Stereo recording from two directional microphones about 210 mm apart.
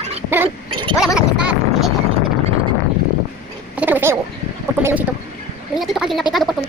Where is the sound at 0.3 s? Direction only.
10° right (ahead or behind).